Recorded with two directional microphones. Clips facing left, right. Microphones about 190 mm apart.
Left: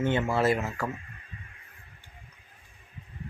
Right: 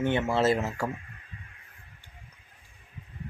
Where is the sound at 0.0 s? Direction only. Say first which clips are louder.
Even; 20° right (ahead or behind).